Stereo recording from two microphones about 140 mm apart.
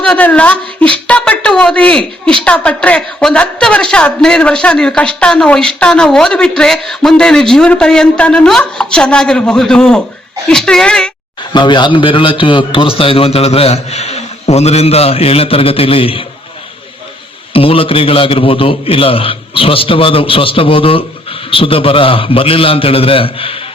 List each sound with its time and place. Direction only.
0.0 s a woman's voice: 10° left (ahead or behind)
11.5 s a man's voice: 35° left (ahead or behind)
17.5 s a man's voice: 40° left (ahead or behind)